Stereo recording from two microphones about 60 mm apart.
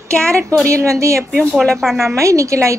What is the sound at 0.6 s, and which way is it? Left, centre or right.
Speech, right.